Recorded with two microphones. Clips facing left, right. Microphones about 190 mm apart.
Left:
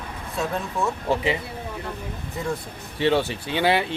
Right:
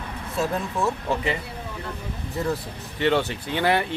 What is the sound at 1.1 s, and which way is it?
Speech, 15° left (ahead or behind).